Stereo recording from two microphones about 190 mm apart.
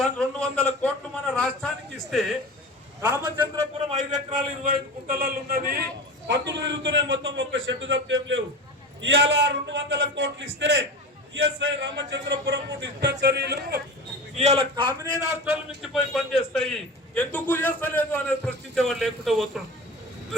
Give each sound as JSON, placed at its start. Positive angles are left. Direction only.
{"t": 0.0, "sound": "a sound", "side_deg": 5}
{"t": 3.0, "sound": "a man's voice", "side_deg": -20}
{"t": 3.9, "sound": "a man's voice", "side_deg": -40}
{"t": 6.2, "sound": "a man's voice", "side_deg": -65}
{"t": 11.4, "sound": "speech", "side_deg": -80}
{"t": 14.3, "sound": "a man's voice", "side_deg": -35}
{"t": 15.8, "sound": "a man's voice", "side_deg": 0}